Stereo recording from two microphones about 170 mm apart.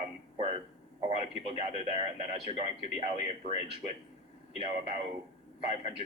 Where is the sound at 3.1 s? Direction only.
40° left (ahead or behind).